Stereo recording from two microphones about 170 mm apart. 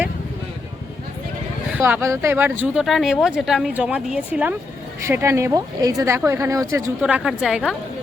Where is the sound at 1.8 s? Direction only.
15° right (ahead or behind).